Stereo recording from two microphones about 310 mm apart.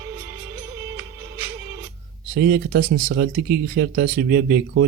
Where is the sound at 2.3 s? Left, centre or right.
Right.